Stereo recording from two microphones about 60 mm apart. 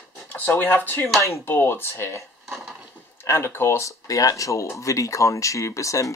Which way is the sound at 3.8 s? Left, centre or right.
Left.